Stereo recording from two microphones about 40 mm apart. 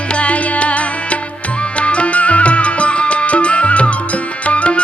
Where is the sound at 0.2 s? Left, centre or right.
Left.